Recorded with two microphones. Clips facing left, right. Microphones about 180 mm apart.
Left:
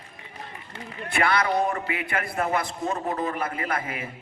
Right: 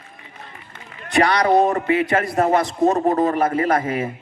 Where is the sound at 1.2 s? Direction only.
40° right (ahead or behind).